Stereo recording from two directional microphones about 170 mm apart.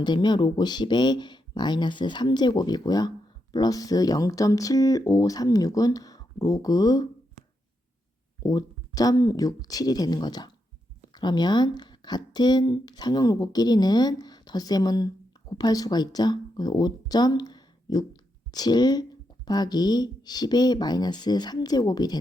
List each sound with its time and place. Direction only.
0.0 s speech: 25° left (ahead or behind)
8.4 s speech: 20° left (ahead or behind)